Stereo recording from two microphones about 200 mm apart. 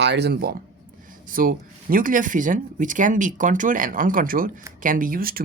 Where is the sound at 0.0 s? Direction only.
60° right (ahead or behind).